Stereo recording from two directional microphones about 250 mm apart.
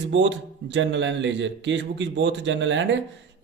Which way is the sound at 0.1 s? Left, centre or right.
Right.